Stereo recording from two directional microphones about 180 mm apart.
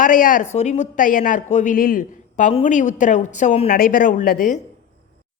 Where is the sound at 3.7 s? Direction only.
50° left (ahead or behind).